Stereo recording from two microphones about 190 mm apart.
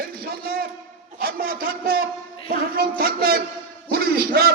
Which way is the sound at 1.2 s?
50° right (ahead or behind).